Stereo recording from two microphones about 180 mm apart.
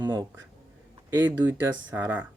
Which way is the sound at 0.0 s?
20° right (ahead or behind).